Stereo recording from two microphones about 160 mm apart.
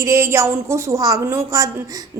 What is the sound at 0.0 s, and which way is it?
A woman's voice, 20° right (ahead or behind).